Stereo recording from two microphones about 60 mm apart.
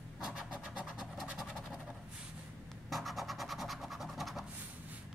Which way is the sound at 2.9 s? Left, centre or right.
Centre.